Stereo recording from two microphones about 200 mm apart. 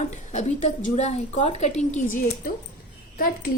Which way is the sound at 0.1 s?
35° left (ahead or behind).